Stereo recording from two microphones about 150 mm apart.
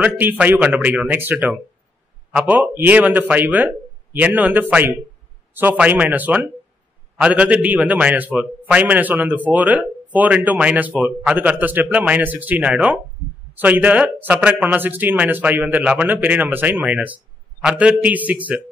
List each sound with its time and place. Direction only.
0.0 s speech: 10° right (ahead or behind)